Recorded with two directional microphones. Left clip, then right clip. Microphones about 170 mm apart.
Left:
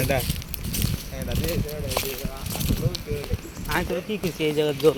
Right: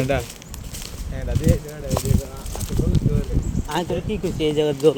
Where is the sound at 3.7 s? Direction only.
25° right (ahead or behind).